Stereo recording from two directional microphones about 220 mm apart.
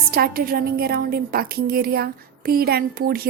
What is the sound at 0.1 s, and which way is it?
A woman's voice, 40° right (ahead or behind).